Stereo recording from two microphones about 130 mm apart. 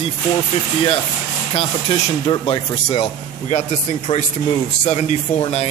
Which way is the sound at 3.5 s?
60° left (ahead or behind).